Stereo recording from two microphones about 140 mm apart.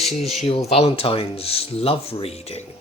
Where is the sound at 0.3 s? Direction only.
45° left (ahead or behind).